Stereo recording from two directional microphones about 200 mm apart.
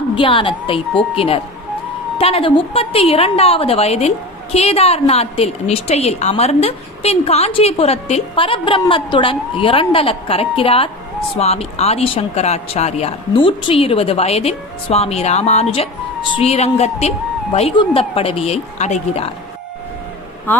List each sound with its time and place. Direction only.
0.2 s a woman's voice: 25° left (ahead or behind)
20.5 s speech: 10° left (ahead or behind)